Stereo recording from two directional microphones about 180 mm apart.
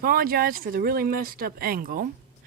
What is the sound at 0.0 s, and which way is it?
Speech, 55° right (ahead or behind).